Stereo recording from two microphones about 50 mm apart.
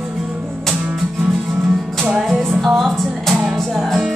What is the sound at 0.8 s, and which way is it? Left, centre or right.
Music, centre.